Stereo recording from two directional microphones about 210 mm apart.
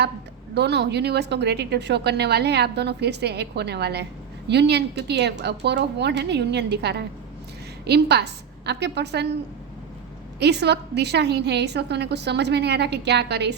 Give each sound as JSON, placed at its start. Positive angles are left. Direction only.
{"t": 0.5, "sound": "speech", "side_deg": -55}
{"t": 10.4, "sound": "speech", "side_deg": -50}